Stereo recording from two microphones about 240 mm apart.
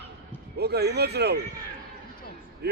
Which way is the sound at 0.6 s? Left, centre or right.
Right.